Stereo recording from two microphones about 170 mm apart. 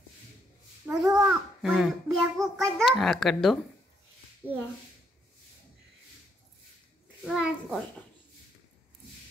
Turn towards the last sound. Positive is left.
turn(degrees=-5)  # may be behind; listen again after turning